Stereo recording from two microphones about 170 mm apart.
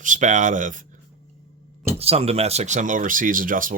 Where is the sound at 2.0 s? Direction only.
35° right (ahead or behind); by 3.7 s 55° right (ahead or behind).